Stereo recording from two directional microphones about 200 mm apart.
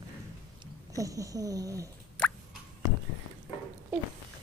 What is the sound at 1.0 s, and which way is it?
Speech, 15° right (ahead or behind).